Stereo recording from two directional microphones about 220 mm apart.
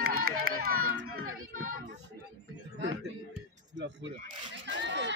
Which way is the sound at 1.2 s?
70° right (ahead or behind).